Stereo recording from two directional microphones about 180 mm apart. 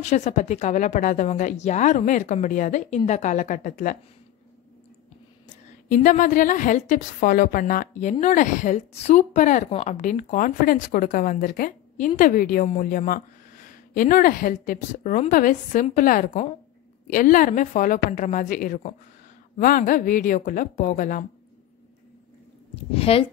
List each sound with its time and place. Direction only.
0.0 s a woman's voice: 40° left (ahead or behind)
5.9 s a woman's voice: 45° left (ahead or behind)
22.9 s a woman's voice: 30° left (ahead or behind)